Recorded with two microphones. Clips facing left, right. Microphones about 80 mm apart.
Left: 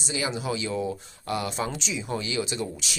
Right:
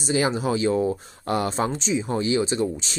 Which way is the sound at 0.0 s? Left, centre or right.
Right.